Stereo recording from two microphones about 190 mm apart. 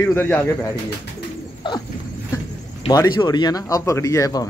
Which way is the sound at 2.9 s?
20° left (ahead or behind).